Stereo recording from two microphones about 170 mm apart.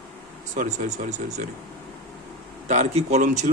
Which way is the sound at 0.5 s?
50° right (ahead or behind).